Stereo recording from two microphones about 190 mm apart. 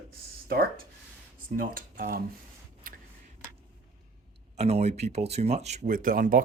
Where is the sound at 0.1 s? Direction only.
55° right (ahead or behind).